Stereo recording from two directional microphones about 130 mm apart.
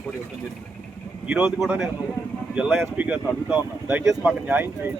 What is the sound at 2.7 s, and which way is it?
Speech, 15° right (ahead or behind).